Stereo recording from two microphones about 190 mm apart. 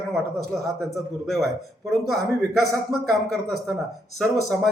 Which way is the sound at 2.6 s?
Centre (ahead or behind).